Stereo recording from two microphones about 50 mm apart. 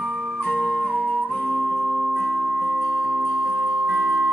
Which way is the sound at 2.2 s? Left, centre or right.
Centre.